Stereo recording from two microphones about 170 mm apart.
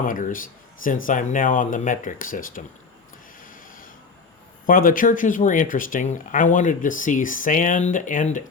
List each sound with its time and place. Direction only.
0.0 s speech: 55° left (ahead or behind)
3.4 s printer: 55° left (ahead or behind)
4.6 s speech: 55° left (ahead or behind)